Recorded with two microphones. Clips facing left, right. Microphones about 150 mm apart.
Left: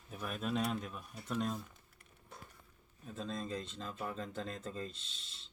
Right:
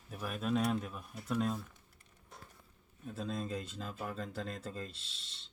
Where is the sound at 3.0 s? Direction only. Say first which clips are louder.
Right 2 dB; 5° right (ahead or behind).